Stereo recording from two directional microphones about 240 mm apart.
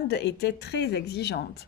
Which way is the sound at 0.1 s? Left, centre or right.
Left.